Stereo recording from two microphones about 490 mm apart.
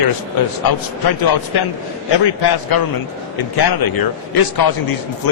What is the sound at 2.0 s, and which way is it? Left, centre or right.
A man's voice, left.